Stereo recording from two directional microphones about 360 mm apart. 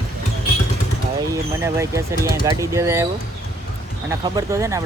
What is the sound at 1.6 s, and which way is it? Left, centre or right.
Speech, centre.